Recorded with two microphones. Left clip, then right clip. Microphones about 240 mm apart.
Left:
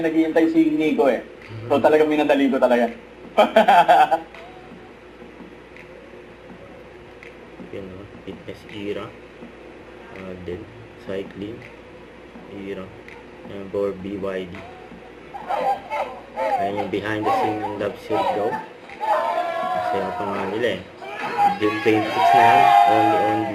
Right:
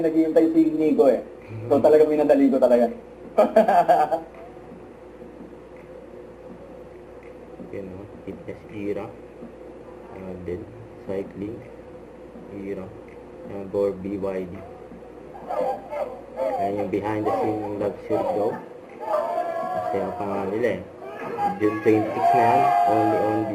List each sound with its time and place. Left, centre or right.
0.0 s speech: left
13.8 s speech: left
15.4 s speech: left
19.0 s a sound: left
21.2 s speech: left